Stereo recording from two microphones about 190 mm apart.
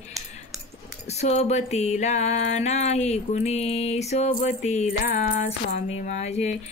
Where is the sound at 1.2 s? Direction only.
35° left (ahead or behind).